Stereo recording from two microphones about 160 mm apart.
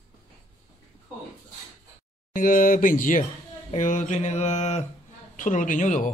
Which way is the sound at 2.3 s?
55° left (ahead or behind).